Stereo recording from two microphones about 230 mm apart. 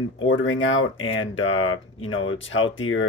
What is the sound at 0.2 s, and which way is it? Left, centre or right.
Speech, left.